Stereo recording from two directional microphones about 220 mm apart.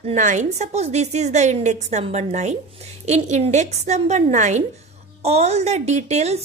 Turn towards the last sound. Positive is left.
turn(degrees=-30)  # may be behind; listen again after turning